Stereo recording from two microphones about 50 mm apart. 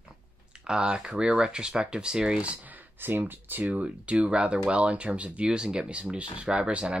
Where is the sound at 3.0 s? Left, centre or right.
Right.